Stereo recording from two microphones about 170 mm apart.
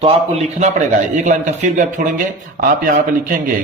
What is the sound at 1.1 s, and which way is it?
Speech, 45° right (ahead or behind).